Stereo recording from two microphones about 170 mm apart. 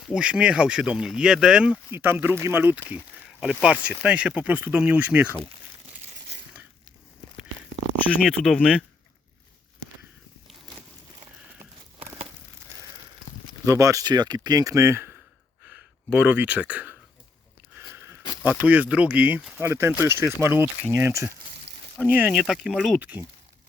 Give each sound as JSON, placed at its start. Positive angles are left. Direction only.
{"t": 0.1, "sound": "speech", "side_deg": -5}
{"t": 8.3, "sound": "speech", "side_deg": 5}
{"t": 13.7, "sound": "speech", "side_deg": -20}
{"t": 15.6, "sound": "a sound", "side_deg": -5}
{"t": 18.6, "sound": "speech", "side_deg": -10}